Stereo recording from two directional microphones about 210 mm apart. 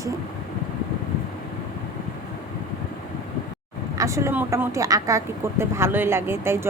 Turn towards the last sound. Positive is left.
turn(degrees=-10)  # may be behind; listen again after turning